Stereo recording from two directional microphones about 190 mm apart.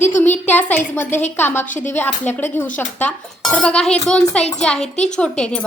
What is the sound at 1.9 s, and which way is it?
A woman's voice, 10° left (ahead or behind).